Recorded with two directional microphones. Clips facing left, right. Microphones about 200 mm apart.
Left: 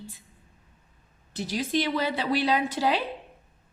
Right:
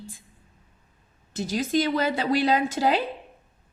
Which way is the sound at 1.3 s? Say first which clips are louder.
Right 3 dB; 45° right (ahead or behind).